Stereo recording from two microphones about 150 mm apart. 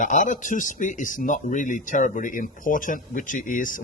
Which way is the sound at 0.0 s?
60° left (ahead or behind).